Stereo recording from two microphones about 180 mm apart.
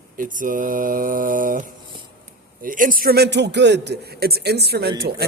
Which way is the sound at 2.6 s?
50° right (ahead or behind).